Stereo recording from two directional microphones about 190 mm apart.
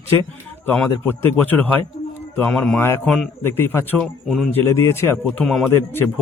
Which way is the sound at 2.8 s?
10° left (ahead or behind).